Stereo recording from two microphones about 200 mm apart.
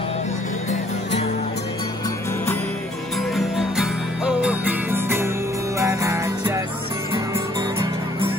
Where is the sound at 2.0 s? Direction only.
15° left (ahead or behind).